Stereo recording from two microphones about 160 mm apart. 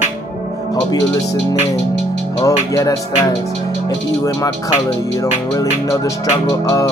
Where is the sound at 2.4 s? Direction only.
20° left (ahead or behind).